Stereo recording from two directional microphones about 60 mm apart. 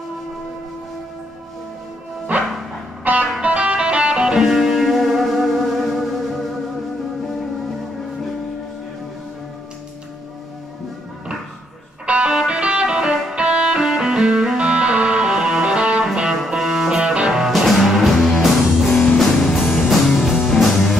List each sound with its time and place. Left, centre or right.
3.0 s music: right; by 6.0 s centre
12.1 s music: centre